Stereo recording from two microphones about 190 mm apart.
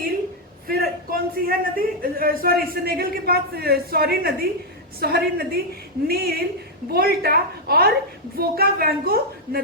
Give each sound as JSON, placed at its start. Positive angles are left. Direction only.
{"t": 0.7, "sound": "a man's voice", "side_deg": -50}